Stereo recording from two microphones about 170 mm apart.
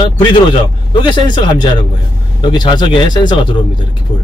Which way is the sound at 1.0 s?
25° left (ahead or behind).